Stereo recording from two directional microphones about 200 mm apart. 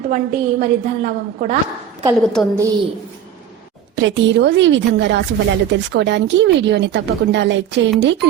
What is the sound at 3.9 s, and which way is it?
Speech, 65° right (ahead or behind).